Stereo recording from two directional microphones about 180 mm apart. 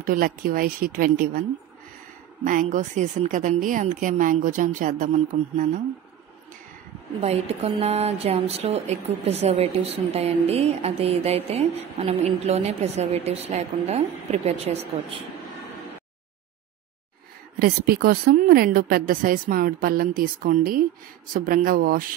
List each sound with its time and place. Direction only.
0.0 s a woman's voice: 55° right (ahead or behind)
2.4 s a woman's voice: 45° right (ahead or behind)
7.2 s speech: 35° right (ahead or behind)
17.6 s a woman's voice: 60° right (ahead or behind)